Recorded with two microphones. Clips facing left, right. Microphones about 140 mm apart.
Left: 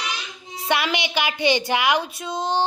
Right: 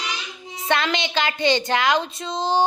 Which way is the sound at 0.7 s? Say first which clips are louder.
Right 1 dB; 10° left (ahead or behind).